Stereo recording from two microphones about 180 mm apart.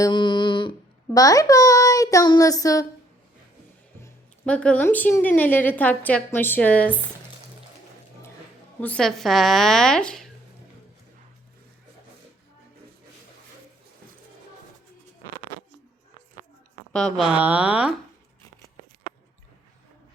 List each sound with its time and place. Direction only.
0.0 s speech: 25° left (ahead or behind)
4.0 s speech: 5° left (ahead or behind)
8.8 s speech: 5° left (ahead or behind)
16.9 s speech: 5° left (ahead or behind)